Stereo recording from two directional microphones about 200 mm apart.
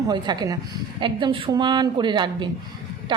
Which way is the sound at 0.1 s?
20° right (ahead or behind).